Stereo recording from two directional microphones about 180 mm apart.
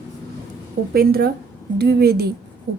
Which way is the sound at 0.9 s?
60° right (ahead or behind).